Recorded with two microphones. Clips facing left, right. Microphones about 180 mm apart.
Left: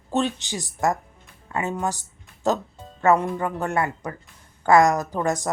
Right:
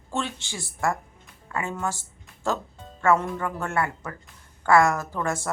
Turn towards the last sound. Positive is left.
turn(degrees=20)  # may be behind; listen again after turning